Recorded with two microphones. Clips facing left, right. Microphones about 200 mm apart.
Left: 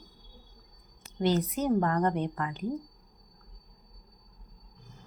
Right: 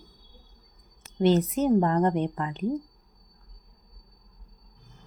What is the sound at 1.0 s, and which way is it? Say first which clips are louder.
A woman's voice: right 5 dB; 25° right (ahead or behind).